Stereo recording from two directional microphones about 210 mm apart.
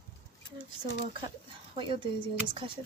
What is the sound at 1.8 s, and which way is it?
Speech, 25° right (ahead or behind).